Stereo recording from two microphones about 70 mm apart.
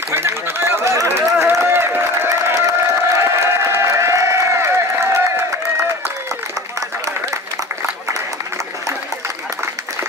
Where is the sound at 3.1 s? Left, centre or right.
Right.